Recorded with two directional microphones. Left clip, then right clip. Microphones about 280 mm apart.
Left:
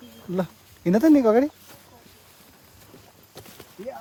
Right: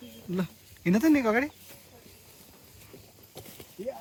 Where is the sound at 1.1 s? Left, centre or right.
Centre.